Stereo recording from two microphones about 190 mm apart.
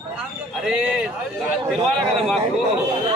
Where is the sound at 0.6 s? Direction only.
5° right (ahead or behind).